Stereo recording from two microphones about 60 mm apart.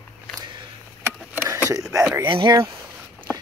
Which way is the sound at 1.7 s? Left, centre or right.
Right.